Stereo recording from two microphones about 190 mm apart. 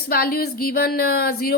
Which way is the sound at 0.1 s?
50° left (ahead or behind).